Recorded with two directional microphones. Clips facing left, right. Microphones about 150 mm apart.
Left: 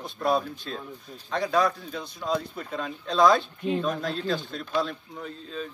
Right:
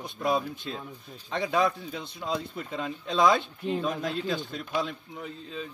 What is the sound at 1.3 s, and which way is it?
A man's voice, 20° right (ahead or behind).